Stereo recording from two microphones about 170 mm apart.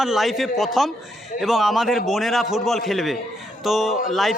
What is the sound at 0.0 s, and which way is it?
A man's voice, centre (ahead or behind).